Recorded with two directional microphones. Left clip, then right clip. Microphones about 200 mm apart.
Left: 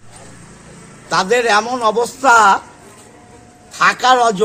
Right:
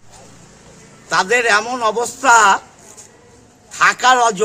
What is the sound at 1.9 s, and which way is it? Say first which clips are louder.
Speech: left 2 dB; 10° right (ahead or behind).